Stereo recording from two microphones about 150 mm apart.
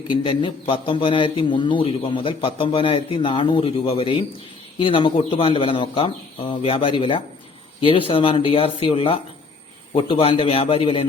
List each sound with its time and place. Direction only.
0.1 s speech: 35° left (ahead or behind)